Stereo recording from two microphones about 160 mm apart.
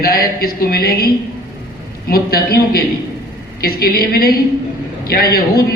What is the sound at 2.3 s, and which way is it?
A man's voice, 70° left (ahead or behind).